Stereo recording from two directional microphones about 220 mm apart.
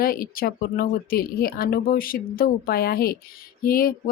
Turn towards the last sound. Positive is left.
turn(degrees=40)  # may be behind; listen again after turning